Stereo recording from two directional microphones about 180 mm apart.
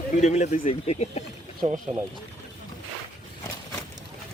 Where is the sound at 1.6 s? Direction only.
40° right (ahead or behind).